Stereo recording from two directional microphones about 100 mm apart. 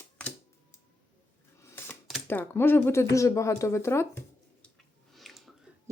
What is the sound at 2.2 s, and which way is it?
Speech, 20° left (ahead or behind).